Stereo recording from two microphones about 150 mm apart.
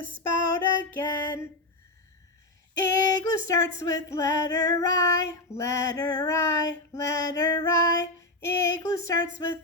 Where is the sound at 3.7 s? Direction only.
20° left (ahead or behind).